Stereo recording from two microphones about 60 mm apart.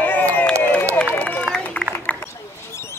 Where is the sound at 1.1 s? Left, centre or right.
Left.